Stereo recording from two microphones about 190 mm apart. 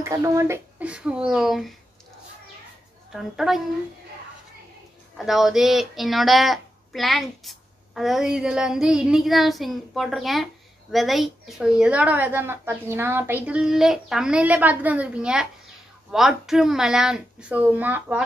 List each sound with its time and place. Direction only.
0.0 s speech: 15° right (ahead or behind)
3.1 s speech: centre (ahead or behind)
5.1 s speech: centre (ahead or behind)